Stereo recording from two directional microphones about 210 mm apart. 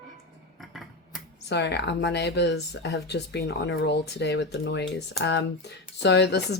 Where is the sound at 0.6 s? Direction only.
Centre (ahead or behind).